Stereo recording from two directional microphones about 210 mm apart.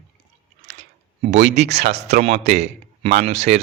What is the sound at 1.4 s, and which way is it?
Speech, 55° right (ahead or behind).